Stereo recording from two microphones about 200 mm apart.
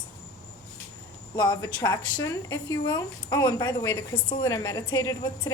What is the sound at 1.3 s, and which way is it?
Speech, 20° left (ahead or behind).